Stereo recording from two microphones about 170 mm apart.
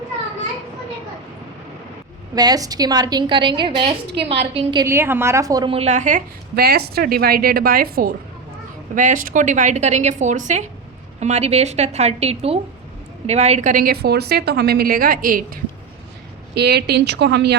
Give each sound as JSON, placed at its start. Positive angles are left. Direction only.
{"t": 2.3, "sound": "a woman's voice", "side_deg": -20}
{"t": 4.9, "sound": "a woman's voice", "side_deg": -15}
{"t": 5.6, "sound": "a woman's voice", "side_deg": -35}
{"t": 9.0, "sound": "a woman's voice", "side_deg": -50}
{"t": 16.6, "sound": "a woman's voice", "side_deg": -75}